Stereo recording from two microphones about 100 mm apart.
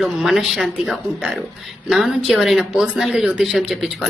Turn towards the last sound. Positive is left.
turn(degrees=-5)  # may be behind; listen again after turning